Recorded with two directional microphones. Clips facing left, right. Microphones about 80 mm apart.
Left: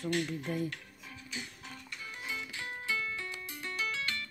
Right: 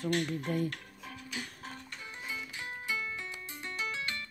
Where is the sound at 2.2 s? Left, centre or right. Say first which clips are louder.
Left 1 dB; centre.